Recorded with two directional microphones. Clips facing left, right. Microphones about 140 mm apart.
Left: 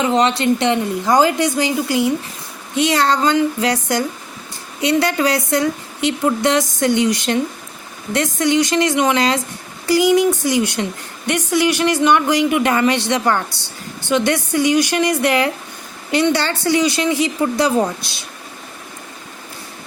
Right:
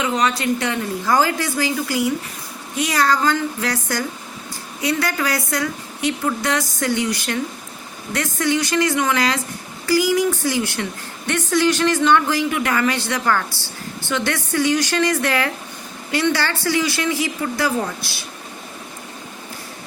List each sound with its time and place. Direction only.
0.0 s a woman's voice: 25° left (ahead or behind)